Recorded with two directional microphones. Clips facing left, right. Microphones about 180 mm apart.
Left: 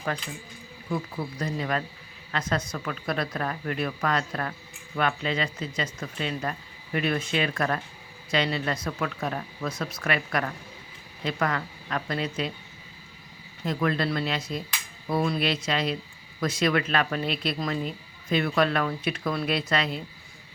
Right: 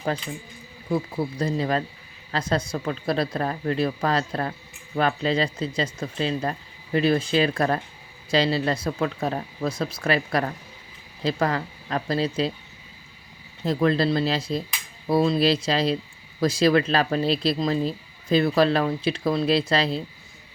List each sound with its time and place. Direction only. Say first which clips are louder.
0.9 s speech: right 5 dB; 30° right (ahead or behind)
13.7 s speech: right 5 dB; 30° right (ahead or behind)